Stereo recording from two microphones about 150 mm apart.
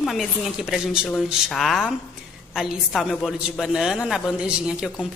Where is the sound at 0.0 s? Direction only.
Centre (ahead or behind).